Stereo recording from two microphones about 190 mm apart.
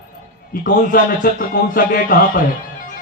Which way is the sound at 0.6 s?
45° left (ahead or behind).